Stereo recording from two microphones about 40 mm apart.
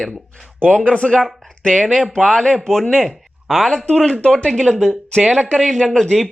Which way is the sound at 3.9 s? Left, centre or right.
Centre.